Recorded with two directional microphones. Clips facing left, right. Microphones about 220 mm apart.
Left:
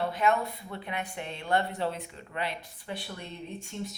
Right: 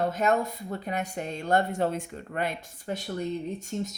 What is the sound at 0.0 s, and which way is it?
A woman's voice, 45° right (ahead or behind).